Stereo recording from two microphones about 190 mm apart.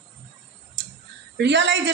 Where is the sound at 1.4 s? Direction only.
70° right (ahead or behind).